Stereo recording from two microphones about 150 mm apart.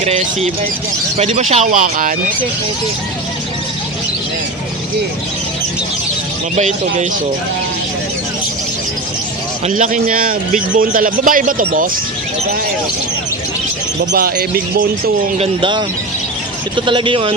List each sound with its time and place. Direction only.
0.0 s a man's voice: 45° right (ahead or behind); by 2.1 s 65° right (ahead or behind)
6.6 s speech: 50° right (ahead or behind)
9.6 s a man's voice: 60° right (ahead or behind)
14.1 s speech: 80° right
15.4 s speech: 35° right (ahead or behind)